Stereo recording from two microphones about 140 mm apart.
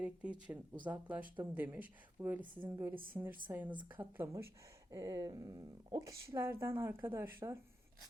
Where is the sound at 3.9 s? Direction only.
15° right (ahead or behind).